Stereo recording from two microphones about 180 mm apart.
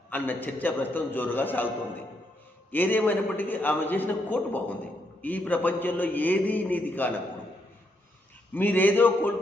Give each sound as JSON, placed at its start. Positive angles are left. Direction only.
{"t": 0.1, "sound": "a man's voice", "side_deg": 10}
{"t": 2.7, "sound": "a man's voice", "side_deg": 10}
{"t": 8.5, "sound": "a man's voice", "side_deg": 10}